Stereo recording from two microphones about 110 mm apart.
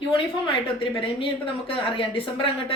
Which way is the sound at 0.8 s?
50° left (ahead or behind).